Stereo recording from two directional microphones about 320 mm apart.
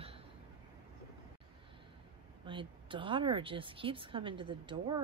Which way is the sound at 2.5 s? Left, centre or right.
Centre.